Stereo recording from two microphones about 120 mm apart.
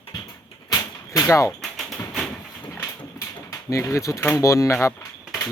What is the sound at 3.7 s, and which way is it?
Speech, 25° left (ahead or behind).